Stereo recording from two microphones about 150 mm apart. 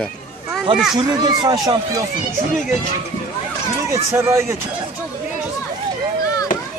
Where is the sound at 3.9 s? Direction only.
20° right (ahead or behind).